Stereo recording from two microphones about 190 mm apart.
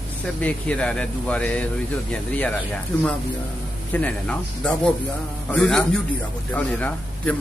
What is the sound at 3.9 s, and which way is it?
Speech, 5° left (ahead or behind).